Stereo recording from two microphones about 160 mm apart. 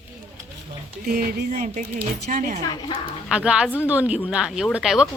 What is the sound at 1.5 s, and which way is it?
Speech, 50° right (ahead or behind).